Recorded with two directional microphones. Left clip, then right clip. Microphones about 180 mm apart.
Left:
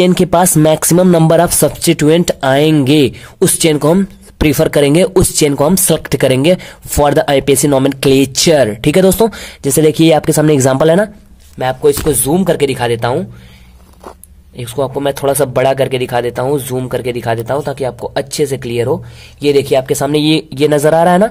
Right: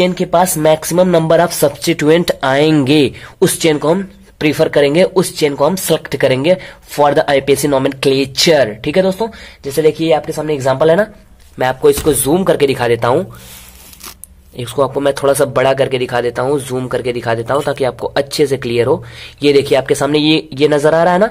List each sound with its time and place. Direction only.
0.0 s speech: 45° left (ahead or behind)
11.5 s a man's voice: 15° left (ahead or behind)
14.6 s a man's voice: 15° left (ahead or behind)